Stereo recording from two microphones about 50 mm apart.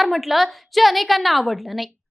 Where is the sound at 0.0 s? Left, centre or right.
Centre.